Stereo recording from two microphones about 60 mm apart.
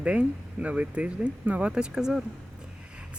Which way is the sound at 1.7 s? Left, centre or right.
Centre.